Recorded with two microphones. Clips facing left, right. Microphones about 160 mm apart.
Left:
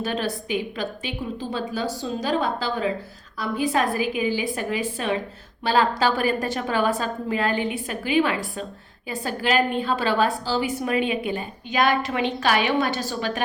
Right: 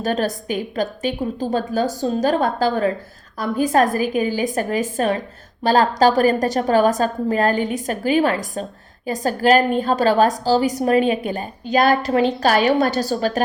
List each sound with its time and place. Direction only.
0.0 s a woman's voice: 45° right (ahead or behind)